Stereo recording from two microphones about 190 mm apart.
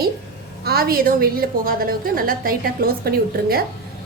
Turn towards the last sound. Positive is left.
turn(degrees=-55)  # may be behind; listen again after turning